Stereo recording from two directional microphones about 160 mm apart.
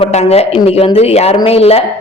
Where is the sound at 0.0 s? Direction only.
40° left (ahead or behind).